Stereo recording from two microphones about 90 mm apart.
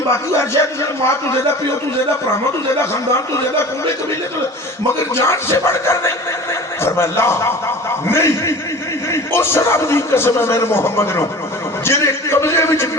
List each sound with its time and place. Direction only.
0.1 s a man's voice: 30° left (ahead or behind)
2.9 s a man's voice: 30° left (ahead or behind)
5.1 s a man's voice: 30° left (ahead or behind)
11.9 s a sound: 30° left (ahead or behind)